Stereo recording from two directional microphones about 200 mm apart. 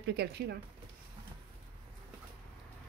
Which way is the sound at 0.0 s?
55° right (ahead or behind).